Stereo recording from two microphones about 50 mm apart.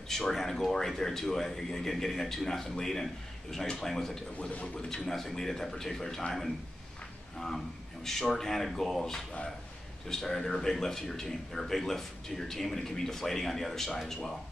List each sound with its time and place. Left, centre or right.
0.1 s a man's voice: centre
4.4 s speech: left
4.7 s a man's voice: centre